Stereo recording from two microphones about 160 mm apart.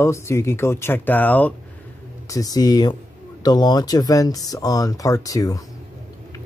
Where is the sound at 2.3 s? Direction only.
20° left (ahead or behind).